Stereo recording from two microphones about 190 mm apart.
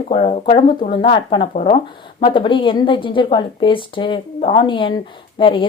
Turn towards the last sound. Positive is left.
turn(degrees=25)  # may be behind; listen again after turning